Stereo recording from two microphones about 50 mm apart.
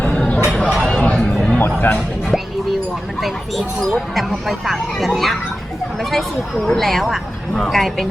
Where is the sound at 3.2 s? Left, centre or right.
Centre.